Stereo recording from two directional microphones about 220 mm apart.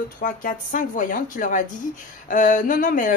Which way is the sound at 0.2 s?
35° left (ahead or behind).